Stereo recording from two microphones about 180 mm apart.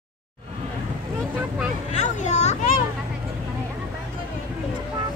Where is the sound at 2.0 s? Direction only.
40° left (ahead or behind).